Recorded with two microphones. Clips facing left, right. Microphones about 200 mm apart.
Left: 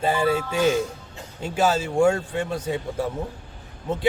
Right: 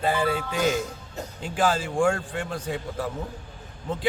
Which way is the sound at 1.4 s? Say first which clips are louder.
Left 3 dB; 25° left (ahead or behind).